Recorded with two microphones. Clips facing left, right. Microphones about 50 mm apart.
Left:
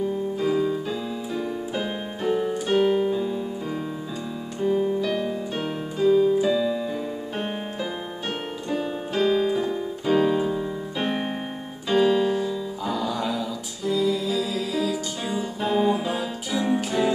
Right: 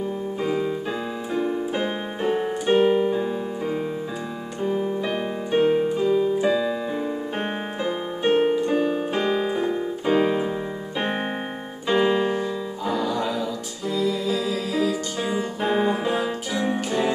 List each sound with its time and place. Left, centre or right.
0.4 s piano: right
2.7 s piano: centre
4.6 s keyboard: centre
5.0 s keyboard: right
7.3 s piano: right
11.9 s keyboard: right
12.8 s music: centre
15.2 s music: right